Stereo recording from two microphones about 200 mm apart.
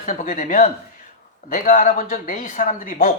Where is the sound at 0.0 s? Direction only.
40° left (ahead or behind).